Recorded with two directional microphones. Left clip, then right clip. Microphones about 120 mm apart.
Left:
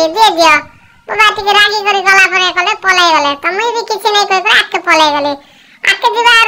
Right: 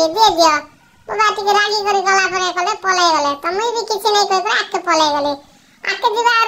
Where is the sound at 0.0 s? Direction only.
35° left (ahead or behind).